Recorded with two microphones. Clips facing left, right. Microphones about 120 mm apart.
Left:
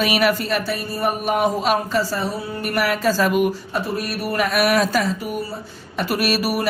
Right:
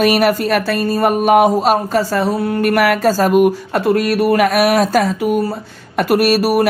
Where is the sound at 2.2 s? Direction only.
70° right (ahead or behind); by 3.5 s 45° right (ahead or behind).